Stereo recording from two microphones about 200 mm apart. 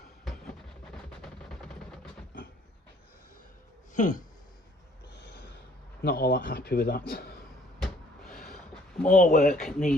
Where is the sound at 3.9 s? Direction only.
40° left (ahead or behind).